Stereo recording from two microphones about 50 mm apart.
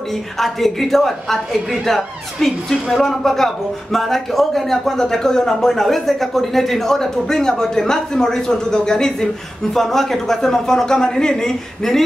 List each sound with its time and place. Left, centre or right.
0.1 s a woman's voice: centre